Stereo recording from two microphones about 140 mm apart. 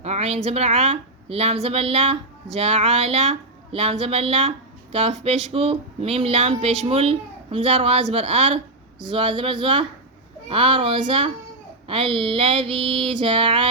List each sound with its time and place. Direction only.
0.0 s a woman's voice: 50° right (ahead or behind)
9.0 s female singing: 35° right (ahead or behind)